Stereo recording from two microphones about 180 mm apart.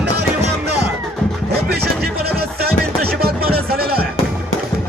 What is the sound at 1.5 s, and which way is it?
Music, 60° right (ahead or behind).